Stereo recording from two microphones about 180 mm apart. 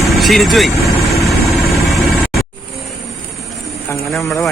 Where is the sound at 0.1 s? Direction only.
Centre (ahead or behind).